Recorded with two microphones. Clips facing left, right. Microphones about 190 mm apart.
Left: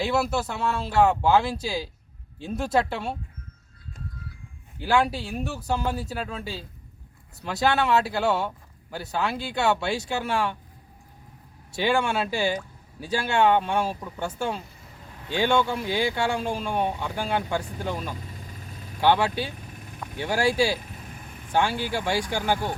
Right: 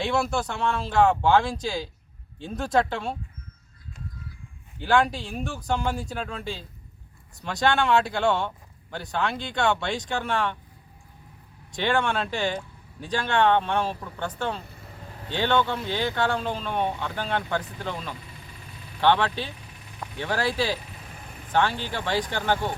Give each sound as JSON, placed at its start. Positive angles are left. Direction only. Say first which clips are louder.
{"t": 0.0, "sound": "speech", "louder": "left 1 dB", "side_deg": 5}
{"t": 4.8, "sound": "speech", "louder": "right 1 dB", "side_deg": 5}
{"t": 11.7, "sound": "speech", "louder": "left 1 dB", "side_deg": 10}
{"t": 19.5, "sound": "vehicle", "louder": "left 5 dB", "side_deg": 50}
{"t": 20.1, "sound": "speech", "louder": "left 3 dB", "side_deg": 10}